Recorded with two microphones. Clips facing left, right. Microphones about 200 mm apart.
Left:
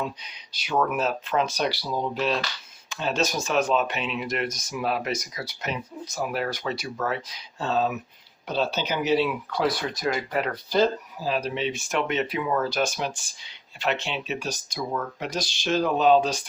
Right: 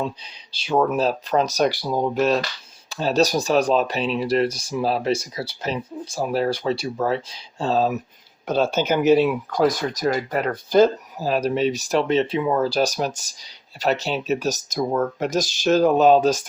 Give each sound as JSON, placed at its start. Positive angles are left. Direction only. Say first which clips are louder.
{"t": 0.0, "sound": "speech", "louder": "right 4 dB", "side_deg": -30}
{"t": 8.4, "sound": "speech", "louder": "right 6 dB", "side_deg": -50}